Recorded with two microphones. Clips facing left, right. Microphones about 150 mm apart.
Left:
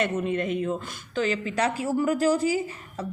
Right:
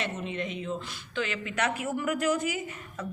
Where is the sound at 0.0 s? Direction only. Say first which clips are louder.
Left 7 dB; 50° left (ahead or behind).